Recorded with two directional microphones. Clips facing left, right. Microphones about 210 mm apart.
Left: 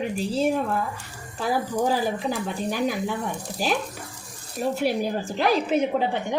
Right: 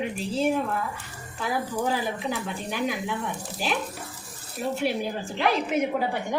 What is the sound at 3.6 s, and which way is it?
Speech, 40° left (ahead or behind).